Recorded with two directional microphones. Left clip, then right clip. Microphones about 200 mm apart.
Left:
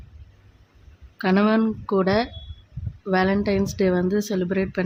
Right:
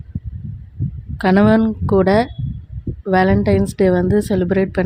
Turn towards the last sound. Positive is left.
turn(degrees=-20)  # may be behind; listen again after turning